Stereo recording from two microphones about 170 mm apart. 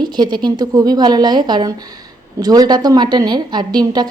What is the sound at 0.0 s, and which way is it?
A woman's voice, 25° right (ahead or behind).